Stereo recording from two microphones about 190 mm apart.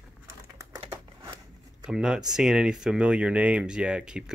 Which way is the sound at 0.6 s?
20° right (ahead or behind).